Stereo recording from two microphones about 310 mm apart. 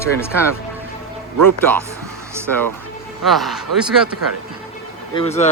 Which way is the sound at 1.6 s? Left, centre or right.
Centre.